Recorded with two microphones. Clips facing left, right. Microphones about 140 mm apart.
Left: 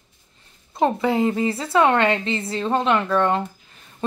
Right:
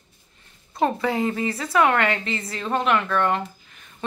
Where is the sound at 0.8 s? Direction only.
20° left (ahead or behind).